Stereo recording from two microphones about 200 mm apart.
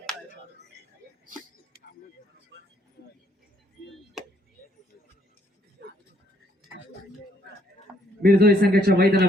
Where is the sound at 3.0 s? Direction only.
50° left (ahead or behind).